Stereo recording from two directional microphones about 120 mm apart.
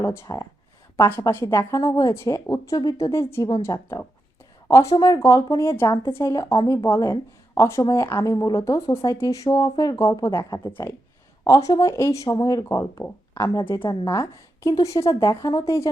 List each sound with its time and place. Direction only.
0.0 s speech: 25° left (ahead or behind)